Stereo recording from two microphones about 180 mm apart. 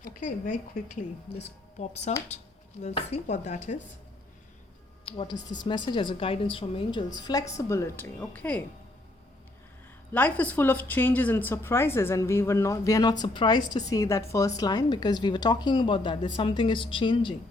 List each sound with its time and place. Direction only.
0.0 s a woman's voice: 50° left (ahead or behind)
1.8 s speech: 40° left (ahead or behind)
5.0 s a woman's voice: 30° left (ahead or behind); by 8.6 s 10° left (ahead or behind)
10.1 s a woman's voice: 10° left (ahead or behind); by 17.3 s 25° left (ahead or behind)